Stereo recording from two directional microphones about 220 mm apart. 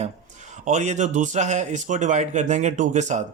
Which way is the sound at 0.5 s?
30° right (ahead or behind).